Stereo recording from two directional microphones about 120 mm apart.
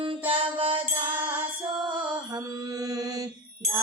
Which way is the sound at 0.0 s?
45° right (ahead or behind).